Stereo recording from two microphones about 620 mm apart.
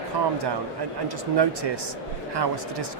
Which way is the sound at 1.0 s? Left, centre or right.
Right.